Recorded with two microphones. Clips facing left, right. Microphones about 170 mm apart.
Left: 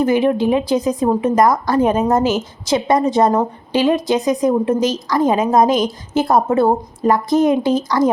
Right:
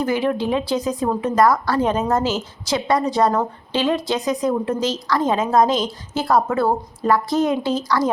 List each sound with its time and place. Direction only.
0.0 s a woman's voice: 20° left (ahead or behind)